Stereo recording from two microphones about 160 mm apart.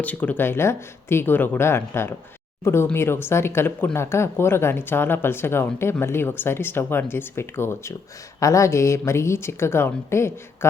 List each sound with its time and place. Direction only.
0.0 s speech: 10° left (ahead or behind)